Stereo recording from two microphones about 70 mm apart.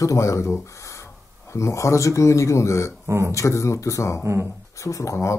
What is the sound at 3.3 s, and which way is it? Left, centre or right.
Speech, left.